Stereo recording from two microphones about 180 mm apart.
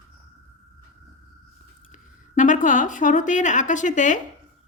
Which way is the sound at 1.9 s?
45° left (ahead or behind).